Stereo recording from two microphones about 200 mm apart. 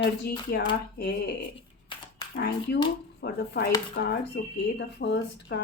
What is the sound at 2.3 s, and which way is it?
Speech, 55° left (ahead or behind).